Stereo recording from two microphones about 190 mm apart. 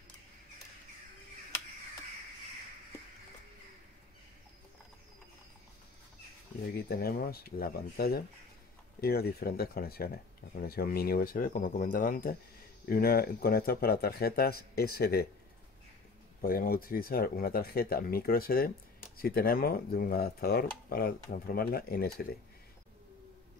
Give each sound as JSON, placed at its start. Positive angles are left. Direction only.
{"t": 6.9, "sound": "speech", "side_deg": 55}
{"t": 16.3, "sound": "speech", "side_deg": 50}